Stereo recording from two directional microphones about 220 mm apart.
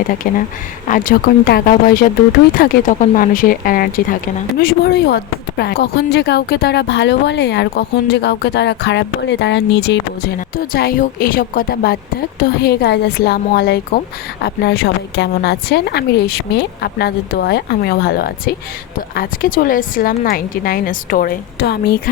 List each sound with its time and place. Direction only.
0.2 s a woman's voice: 40° left (ahead or behind)